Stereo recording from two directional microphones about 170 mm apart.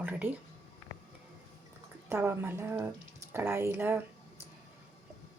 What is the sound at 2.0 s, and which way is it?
Speech, 15° right (ahead or behind).